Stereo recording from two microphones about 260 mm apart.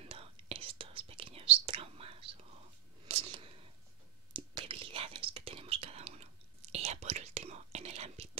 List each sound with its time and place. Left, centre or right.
0.0 s whispering: right
3.1 s a sound: right
4.3 s whispering: centre